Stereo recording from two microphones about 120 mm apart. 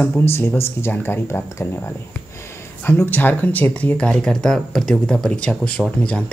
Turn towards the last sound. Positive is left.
turn(degrees=10)  # may be behind; listen again after turning